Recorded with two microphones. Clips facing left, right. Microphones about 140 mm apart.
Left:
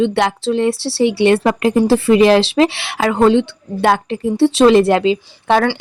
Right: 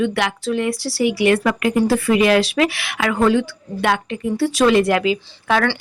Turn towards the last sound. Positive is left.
turn(degrees=30)  # may be behind; listen again after turning